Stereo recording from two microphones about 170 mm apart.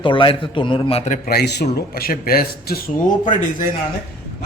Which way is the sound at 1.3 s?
75° left (ahead or behind).